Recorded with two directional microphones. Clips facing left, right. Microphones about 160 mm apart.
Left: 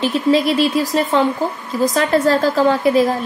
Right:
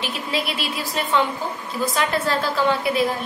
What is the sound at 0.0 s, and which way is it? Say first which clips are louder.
A woman's voice: left 11 dB; 40° left (ahead or behind).